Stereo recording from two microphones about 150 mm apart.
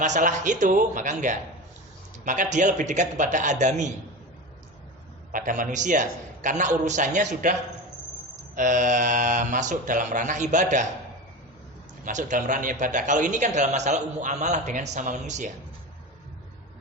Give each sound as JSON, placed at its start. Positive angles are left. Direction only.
{"t": 0.0, "sound": "a man's voice", "side_deg": -55}
{"t": 5.3, "sound": "a man's voice", "side_deg": -60}
{"t": 8.5, "sound": "a man's voice", "side_deg": -55}
{"t": 12.0, "sound": "a man's voice", "side_deg": -55}